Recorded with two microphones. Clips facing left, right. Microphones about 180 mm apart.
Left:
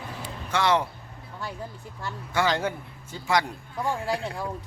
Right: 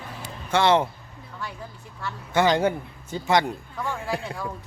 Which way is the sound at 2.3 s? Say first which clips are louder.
Right 5 dB; 20° right (ahead or behind).